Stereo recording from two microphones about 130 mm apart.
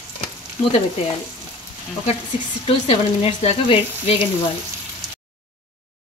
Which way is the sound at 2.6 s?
50° left (ahead or behind).